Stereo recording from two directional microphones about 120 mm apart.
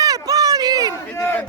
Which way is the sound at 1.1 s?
20° left (ahead or behind).